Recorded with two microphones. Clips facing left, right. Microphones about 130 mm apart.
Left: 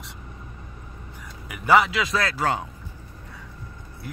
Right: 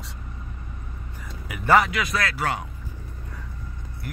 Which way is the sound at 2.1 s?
30° left (ahead or behind).